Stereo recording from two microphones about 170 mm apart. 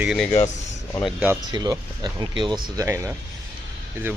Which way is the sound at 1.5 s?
25° right (ahead or behind).